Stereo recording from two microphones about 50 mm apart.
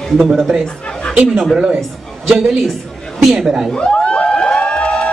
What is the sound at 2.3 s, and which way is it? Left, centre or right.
A man's voice, centre.